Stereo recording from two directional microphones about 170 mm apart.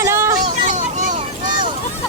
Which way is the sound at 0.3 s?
45° right (ahead or behind).